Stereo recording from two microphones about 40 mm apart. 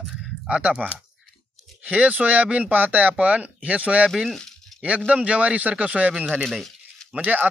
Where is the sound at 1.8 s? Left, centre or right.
Right.